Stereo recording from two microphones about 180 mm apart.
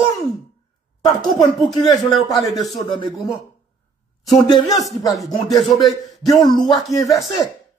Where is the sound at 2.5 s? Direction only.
Centre (ahead or behind).